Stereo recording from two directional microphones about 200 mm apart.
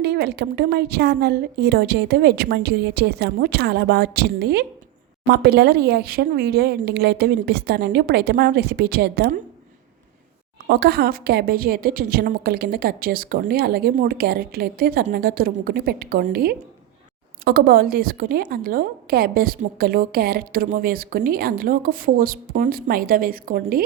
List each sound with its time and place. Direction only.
0.0 s a woman's voice: 55° right (ahead or behind)
10.7 s a woman's voice: 50° right (ahead or behind)